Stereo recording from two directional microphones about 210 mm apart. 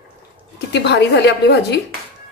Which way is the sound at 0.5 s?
55° left (ahead or behind).